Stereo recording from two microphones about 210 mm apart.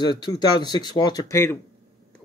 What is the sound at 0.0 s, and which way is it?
Speech, 20° left (ahead or behind).